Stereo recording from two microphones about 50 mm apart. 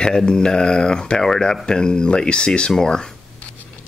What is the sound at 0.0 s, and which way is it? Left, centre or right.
Speech, centre.